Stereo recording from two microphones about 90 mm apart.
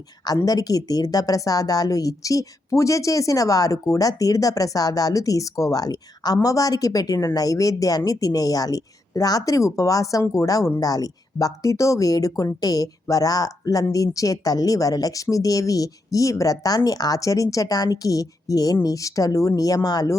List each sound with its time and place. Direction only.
0.4 s speech: 45° left (ahead or behind)